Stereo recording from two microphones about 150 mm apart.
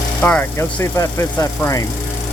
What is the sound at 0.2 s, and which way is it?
Speech, 10° left (ahead or behind).